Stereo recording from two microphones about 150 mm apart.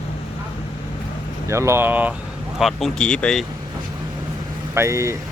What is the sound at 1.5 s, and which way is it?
Speech, 20° right (ahead or behind).